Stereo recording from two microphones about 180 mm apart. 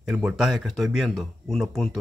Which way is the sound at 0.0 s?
5° right (ahead or behind).